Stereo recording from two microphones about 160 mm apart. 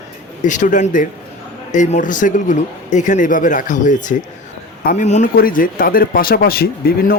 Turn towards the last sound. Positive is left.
turn(degrees=70)  # may be behind; listen again after turning